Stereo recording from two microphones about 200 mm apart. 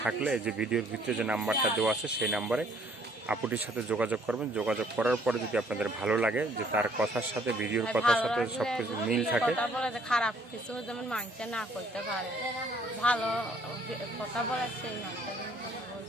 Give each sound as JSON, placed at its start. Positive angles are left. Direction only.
{"t": 0.0, "sound": "speech", "side_deg": -5}
{"t": 13.0, "sound": "speech", "side_deg": 5}